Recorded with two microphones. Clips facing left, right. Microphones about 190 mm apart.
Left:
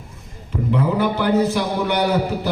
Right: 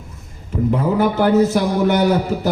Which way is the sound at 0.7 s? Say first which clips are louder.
Right 1 dB; 45° right (ahead or behind).